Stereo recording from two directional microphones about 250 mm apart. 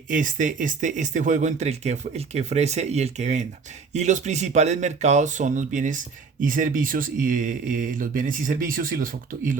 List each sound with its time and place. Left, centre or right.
0.1 s speech: right